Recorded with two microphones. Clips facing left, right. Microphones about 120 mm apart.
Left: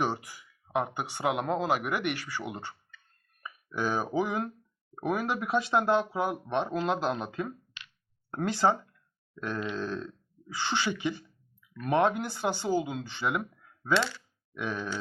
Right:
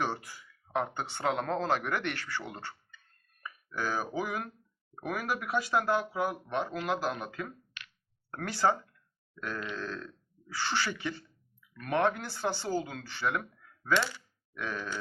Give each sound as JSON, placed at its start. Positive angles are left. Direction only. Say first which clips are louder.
{"t": 0.0, "sound": "speech", "louder": "left 3 dB", "side_deg": 15}